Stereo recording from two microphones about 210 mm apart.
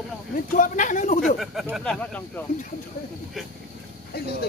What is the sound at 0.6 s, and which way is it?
Speech, 35° left (ahead or behind).